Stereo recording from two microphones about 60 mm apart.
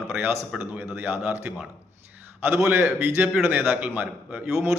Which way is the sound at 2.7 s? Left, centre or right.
Right.